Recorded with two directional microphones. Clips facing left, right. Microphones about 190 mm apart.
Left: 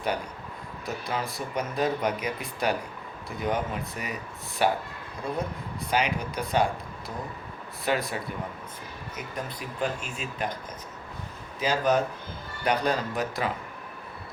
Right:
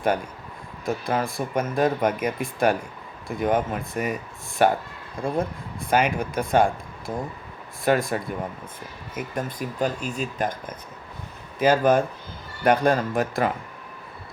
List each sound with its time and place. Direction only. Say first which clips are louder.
0.9 s speech: right 7 dB; 50° right (ahead or behind)
5.9 s speech: right 5 dB; 50° right (ahead or behind)
11.6 s speech: right 6 dB; 50° right (ahead or behind)